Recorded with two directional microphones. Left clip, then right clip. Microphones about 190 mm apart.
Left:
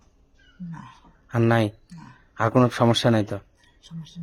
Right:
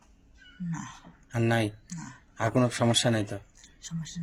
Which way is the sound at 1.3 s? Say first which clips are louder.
Left 6 dB; 55° left (ahead or behind).